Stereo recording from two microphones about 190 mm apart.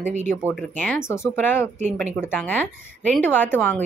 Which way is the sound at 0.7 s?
10° left (ahead or behind).